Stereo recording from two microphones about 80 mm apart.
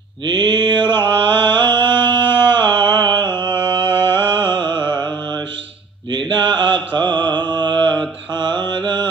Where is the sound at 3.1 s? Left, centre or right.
Left.